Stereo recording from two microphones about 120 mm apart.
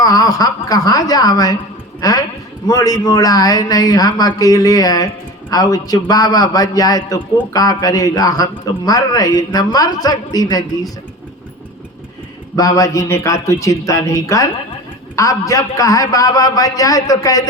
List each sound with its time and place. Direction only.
0.0 s a man's voice: 30° left (ahead or behind)
12.5 s a man's voice: 30° left (ahead or behind)